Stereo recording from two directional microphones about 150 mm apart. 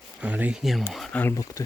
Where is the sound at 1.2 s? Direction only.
20° left (ahead or behind).